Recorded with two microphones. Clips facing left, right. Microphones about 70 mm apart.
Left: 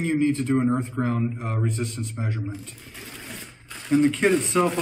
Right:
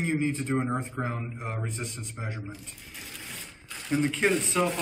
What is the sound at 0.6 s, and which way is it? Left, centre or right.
Speech, centre.